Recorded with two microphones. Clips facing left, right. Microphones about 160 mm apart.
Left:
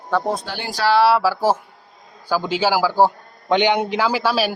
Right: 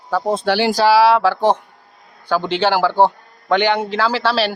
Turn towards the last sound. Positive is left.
turn(degrees=10)  # may be behind; listen again after turning